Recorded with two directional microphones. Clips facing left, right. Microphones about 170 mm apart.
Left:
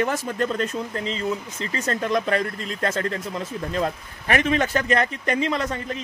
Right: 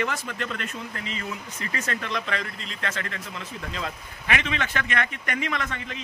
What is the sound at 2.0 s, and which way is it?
Speech, 45° left (ahead or behind).